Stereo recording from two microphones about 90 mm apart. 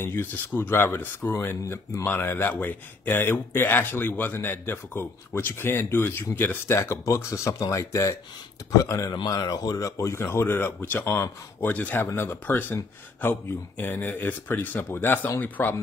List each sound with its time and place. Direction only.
0.0 s speech: 25° left (ahead or behind)